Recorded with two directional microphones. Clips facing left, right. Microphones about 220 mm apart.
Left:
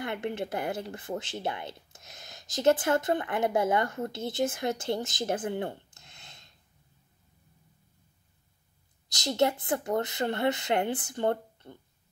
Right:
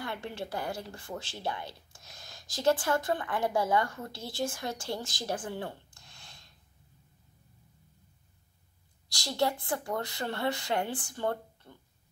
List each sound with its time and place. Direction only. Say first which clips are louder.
0.0 s speech: left 5 dB; 20° left (ahead or behind)
9.4 s speech: left 3 dB; 20° left (ahead or behind)